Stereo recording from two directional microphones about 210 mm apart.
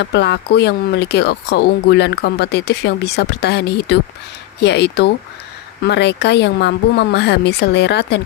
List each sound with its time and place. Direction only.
0.0 s speech: 50° left (ahead or behind)